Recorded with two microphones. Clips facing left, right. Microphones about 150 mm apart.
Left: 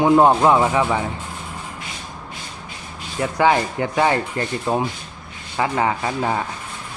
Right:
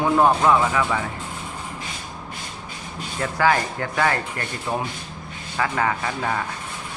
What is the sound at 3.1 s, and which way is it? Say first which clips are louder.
Speech: left 3 dB; 20° left (ahead or behind).